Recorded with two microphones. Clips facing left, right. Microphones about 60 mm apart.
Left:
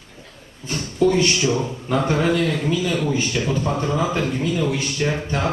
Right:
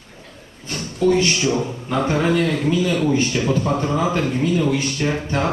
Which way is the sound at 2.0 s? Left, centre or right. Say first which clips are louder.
Right 2 dB; centre.